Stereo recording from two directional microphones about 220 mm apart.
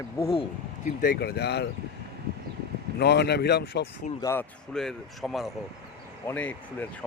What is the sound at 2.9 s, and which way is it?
Speech, 50° left (ahead or behind).